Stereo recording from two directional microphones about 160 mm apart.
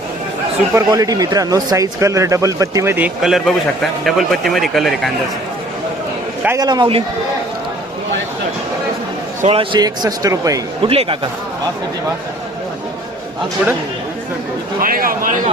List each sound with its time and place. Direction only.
0.7 s speech: 20° right (ahead or behind)
3.2 s a man's voice: centre (ahead or behind)
6.6 s speech: 25° right (ahead or behind)
9.5 s speech: 30° right (ahead or behind)
10.8 s speech: 35° right (ahead or behind)
14.8 s speech: 60° right (ahead or behind)